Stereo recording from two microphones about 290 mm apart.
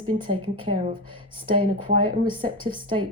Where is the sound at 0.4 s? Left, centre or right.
Centre.